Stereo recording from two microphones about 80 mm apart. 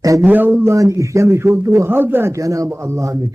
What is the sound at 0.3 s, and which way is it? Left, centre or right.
Speech, right.